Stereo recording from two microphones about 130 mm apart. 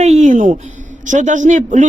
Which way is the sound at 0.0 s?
65° right (ahead or behind).